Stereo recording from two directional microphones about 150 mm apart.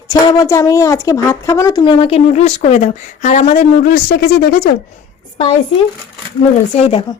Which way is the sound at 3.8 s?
80° left.